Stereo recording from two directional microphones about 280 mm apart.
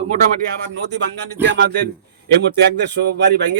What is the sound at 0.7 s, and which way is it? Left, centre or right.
Speech, right.